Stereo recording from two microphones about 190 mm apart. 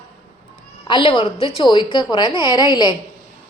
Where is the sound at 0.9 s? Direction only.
25° left (ahead or behind).